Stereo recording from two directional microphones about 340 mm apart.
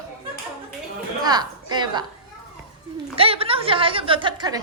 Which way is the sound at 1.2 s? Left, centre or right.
Centre.